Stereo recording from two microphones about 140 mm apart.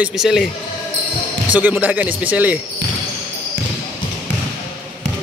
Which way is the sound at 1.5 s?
10° right (ahead or behind).